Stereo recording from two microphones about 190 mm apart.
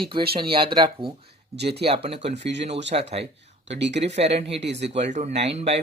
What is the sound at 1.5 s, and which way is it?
Speech, 60° right (ahead or behind).